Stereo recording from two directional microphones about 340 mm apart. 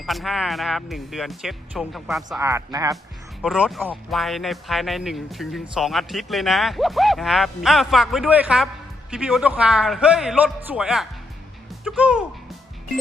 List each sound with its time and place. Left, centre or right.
0.0 s speech: centre